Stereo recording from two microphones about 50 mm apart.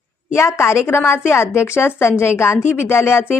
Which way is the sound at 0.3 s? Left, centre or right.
Left.